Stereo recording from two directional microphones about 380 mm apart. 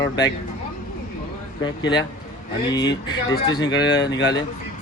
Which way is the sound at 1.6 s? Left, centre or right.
Centre.